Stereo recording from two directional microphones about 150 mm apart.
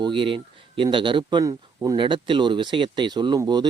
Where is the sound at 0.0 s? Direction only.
35° right (ahead or behind).